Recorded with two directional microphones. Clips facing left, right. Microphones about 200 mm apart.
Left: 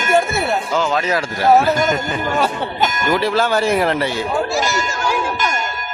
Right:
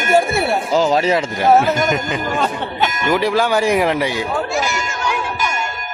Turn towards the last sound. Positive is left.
turn(degrees=-15)  # may be behind; listen again after turning